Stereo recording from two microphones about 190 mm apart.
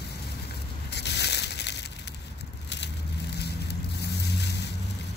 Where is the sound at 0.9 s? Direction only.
60° left (ahead or behind).